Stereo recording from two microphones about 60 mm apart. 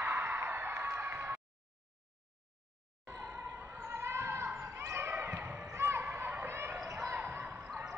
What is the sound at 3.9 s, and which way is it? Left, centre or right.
Basketball bounce, right.